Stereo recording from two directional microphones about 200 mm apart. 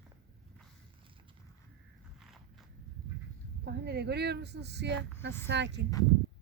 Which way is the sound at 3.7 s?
55° right (ahead or behind).